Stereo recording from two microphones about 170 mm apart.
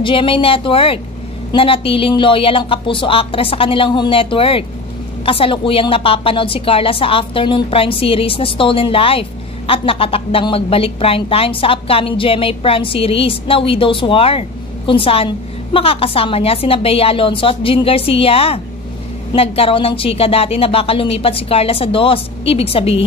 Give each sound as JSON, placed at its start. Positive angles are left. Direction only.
{"t": 0.0, "sound": "a woman's voice", "side_deg": 30}